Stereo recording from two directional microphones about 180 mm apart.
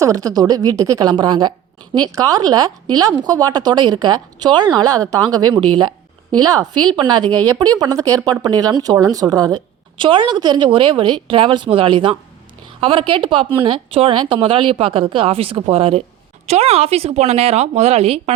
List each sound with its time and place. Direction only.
0.0 s a woman's voice: 20° right (ahead or behind); by 18.2 s 35° right (ahead or behind)